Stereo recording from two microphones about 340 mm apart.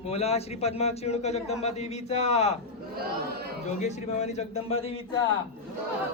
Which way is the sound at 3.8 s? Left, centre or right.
Centre.